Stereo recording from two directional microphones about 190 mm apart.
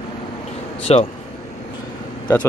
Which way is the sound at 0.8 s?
35° left (ahead or behind).